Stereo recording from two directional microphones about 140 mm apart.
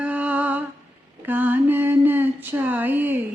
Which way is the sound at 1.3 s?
15° right (ahead or behind).